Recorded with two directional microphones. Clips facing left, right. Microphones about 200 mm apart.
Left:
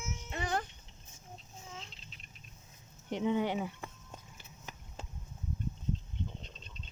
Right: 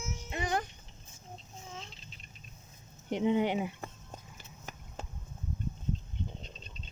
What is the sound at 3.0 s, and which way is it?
Speech, 15° right (ahead or behind).